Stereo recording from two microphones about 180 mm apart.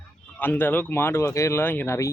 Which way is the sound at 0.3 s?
10° left (ahead or behind).